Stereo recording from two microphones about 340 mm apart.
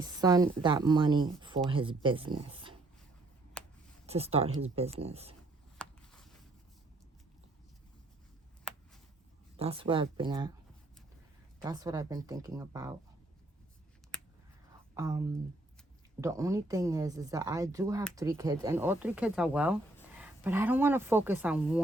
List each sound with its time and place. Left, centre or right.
0.0 s speech: centre
3.6 s a sound: centre
4.0 s speech: centre
5.7 s a sound: centre
9.6 s speech: centre
11.6 s speech: centre
14.9 s speech: centre
16.2 s speech: centre